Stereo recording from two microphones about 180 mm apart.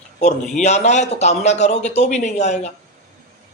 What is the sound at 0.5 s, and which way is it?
A man's voice, 40° left (ahead or behind).